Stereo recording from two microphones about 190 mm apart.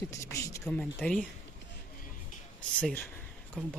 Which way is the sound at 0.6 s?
5° left (ahead or behind).